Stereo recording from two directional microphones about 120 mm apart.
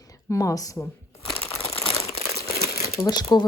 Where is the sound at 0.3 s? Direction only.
30° left (ahead or behind).